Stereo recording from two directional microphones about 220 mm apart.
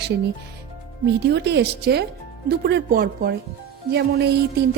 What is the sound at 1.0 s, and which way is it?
A woman's voice, 50° right (ahead or behind).